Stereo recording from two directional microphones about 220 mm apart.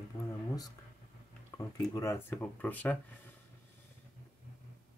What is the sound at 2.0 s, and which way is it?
Speech, 10° left (ahead or behind).